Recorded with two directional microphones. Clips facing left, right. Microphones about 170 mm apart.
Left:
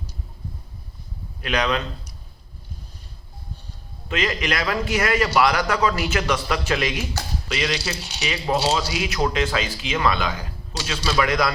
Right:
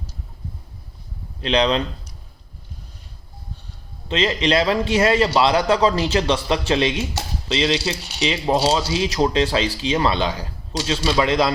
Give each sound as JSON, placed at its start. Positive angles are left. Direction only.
{"t": 1.4, "sound": "a man's voice", "side_deg": -25}
{"t": 4.1, "sound": "speech", "side_deg": -25}